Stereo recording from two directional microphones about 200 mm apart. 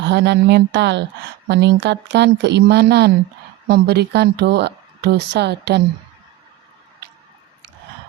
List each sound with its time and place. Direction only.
0.0 s speech: 60° right (ahead or behind)